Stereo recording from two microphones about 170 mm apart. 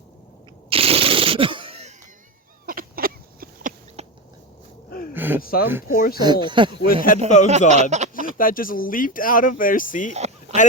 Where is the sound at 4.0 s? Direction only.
40° right (ahead or behind).